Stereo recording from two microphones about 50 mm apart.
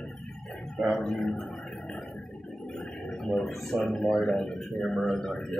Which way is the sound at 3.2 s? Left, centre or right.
Centre.